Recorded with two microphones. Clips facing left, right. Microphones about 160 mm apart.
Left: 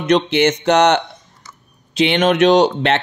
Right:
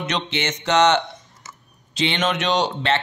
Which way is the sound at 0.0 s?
55° left (ahead or behind).